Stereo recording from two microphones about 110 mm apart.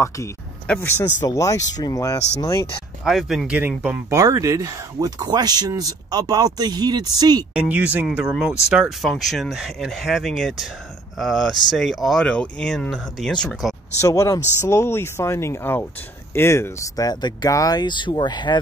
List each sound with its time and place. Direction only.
0.7 s speech: 25° left (ahead or behind)
3.1 s speech: centre (ahead or behind)
3.5 s speech: 15° right (ahead or behind)
4.1 s speech: 30° right (ahead or behind)
7.5 s speech: 15° right (ahead or behind)
14.0 s speech: 30° left (ahead or behind)